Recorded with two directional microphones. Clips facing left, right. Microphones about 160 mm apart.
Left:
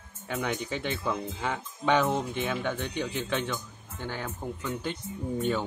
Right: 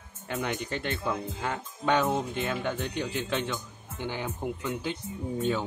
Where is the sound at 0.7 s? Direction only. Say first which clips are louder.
Even; 5° left (ahead or behind); by 4.6 s 15° right (ahead or behind).